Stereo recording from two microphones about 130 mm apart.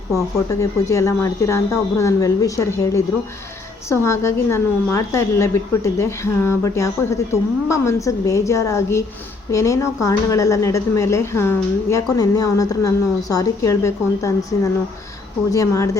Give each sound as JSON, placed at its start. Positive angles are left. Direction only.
{"t": 0.6, "sound": "speech", "side_deg": 25}